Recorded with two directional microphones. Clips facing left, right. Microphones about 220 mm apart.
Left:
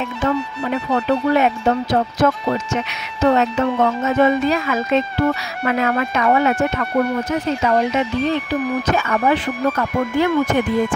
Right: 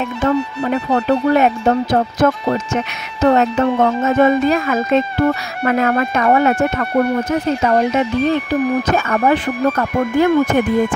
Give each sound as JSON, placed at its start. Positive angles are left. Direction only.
{"t": 0.2, "sound": "speech", "side_deg": -55}